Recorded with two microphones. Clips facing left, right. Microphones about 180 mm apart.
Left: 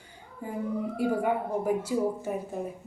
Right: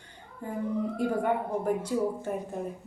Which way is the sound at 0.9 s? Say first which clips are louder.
Left 2 dB; 10° left (ahead or behind).